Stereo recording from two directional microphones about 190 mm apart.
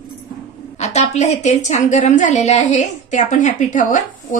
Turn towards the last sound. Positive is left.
turn(degrees=40)  # may be behind; listen again after turning